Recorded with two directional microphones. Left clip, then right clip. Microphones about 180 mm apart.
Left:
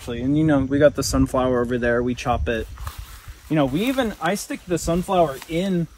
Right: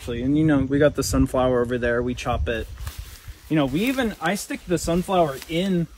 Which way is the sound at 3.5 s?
25° left (ahead or behind).